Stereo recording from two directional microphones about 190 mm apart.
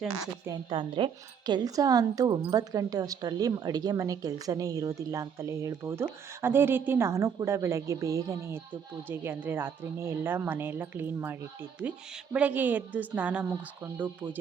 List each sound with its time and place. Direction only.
0.4 s a woman's voice: 25° right (ahead or behind)